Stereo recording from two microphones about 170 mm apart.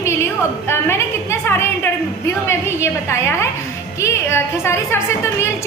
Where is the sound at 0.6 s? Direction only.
15° left (ahead or behind).